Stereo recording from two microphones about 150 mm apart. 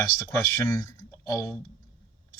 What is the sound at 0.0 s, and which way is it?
A man's voice, 20° left (ahead or behind).